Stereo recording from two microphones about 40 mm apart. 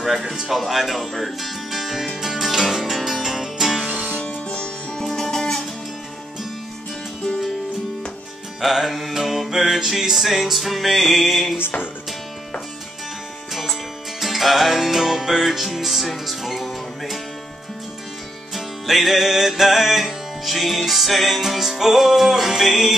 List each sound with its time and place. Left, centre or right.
0.4 s music: centre
4.5 s music: left
5.0 s music: centre
8.5 s music: centre
13.5 s music: centre
18.5 s music: centre